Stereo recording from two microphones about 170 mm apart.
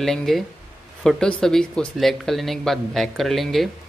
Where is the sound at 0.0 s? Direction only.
Centre (ahead or behind).